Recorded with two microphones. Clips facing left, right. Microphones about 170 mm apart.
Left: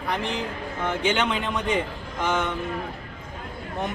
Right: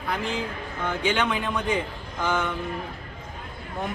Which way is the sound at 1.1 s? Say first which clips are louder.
Even; centre (ahead or behind).